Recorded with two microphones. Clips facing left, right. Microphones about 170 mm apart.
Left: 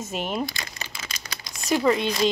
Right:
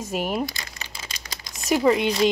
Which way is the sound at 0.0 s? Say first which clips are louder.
Right 2 dB; 5° right (ahead or behind).